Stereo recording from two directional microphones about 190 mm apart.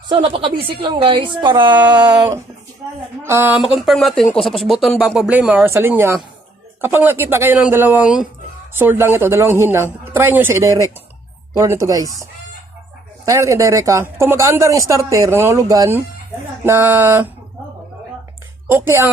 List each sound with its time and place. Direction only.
0.1 s speech: 30° right (ahead or behind)
13.2 s speech: 15° right (ahead or behind)
18.7 s speech: 10° right (ahead or behind)